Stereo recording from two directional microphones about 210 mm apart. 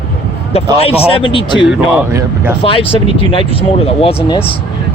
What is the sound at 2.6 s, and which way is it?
Speech, 25° left (ahead or behind).